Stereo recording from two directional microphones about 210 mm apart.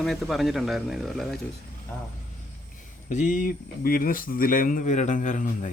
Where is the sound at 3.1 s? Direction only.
35° left (ahead or behind).